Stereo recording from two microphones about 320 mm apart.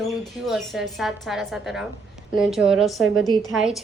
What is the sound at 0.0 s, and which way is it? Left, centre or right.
A woman's voice, centre.